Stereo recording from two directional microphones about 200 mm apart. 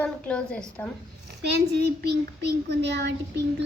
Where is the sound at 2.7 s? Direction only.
60° right (ahead or behind).